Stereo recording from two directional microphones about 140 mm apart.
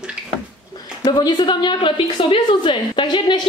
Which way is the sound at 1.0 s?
30° left (ahead or behind).